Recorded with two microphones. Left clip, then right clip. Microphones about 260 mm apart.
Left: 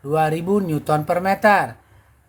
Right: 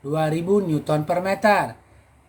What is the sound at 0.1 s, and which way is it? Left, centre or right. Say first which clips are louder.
Speech: left 2 dB; left.